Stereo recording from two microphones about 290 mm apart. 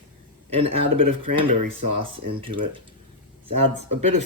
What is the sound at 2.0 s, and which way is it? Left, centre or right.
Speech, centre.